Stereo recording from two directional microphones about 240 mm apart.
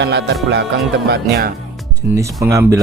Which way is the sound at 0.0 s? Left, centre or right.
Right.